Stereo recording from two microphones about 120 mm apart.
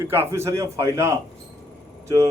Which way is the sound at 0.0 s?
20° right (ahead or behind).